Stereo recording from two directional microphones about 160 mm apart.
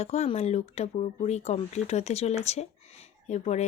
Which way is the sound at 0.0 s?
45° left (ahead or behind).